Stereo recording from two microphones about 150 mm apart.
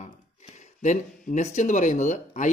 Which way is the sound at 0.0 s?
50° left (ahead or behind).